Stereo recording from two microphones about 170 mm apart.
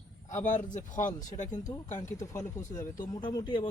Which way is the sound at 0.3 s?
45° left (ahead or behind).